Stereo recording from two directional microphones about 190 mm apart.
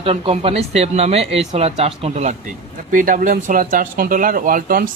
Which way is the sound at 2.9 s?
45° right (ahead or behind).